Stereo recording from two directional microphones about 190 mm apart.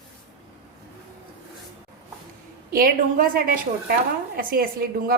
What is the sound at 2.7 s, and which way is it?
A woman's voice, 50° right (ahead or behind).